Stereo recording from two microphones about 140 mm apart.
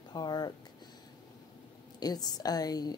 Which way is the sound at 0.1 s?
30° left (ahead or behind).